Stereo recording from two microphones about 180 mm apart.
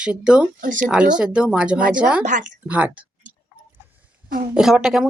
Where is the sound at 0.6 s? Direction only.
45° right (ahead or behind).